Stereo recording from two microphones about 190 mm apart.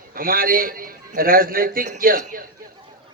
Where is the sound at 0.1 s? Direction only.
50° right (ahead or behind).